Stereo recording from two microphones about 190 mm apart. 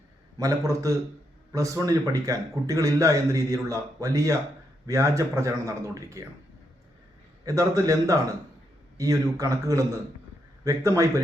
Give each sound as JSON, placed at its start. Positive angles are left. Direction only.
{"t": 0.3, "sound": "a man's voice", "side_deg": -15}
{"t": 7.4, "sound": "a man's voice", "side_deg": -15}